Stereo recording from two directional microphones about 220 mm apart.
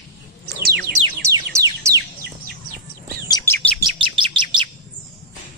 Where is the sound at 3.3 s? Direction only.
15° left (ahead or behind).